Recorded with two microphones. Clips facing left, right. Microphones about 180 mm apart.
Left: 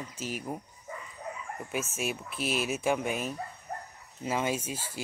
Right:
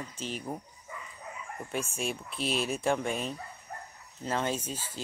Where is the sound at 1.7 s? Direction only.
5° left (ahead or behind).